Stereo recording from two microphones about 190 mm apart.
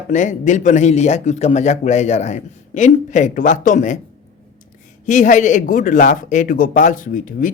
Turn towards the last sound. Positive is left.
turn(degrees=45)  # may be behind; listen again after turning